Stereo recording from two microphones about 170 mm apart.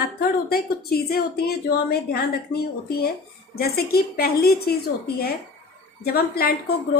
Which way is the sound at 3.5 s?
65° left (ahead or behind).